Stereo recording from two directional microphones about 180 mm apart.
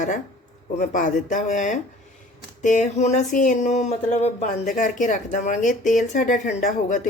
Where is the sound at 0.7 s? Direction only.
45° left (ahead or behind).